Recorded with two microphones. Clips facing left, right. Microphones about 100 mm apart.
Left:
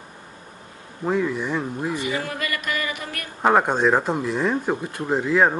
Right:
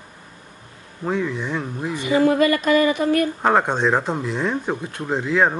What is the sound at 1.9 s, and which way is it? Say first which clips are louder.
Speech: right 10 dB; 25° right (ahead or behind).